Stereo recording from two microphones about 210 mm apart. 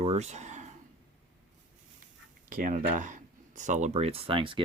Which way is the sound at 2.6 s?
35° right (ahead or behind).